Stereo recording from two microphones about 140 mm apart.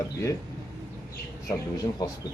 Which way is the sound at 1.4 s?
25° left (ahead or behind).